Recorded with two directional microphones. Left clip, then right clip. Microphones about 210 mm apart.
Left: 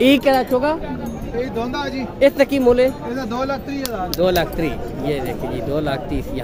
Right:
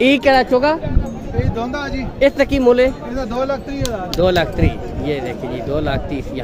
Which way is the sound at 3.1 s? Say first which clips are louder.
Right 3 dB; 40° right (ahead or behind).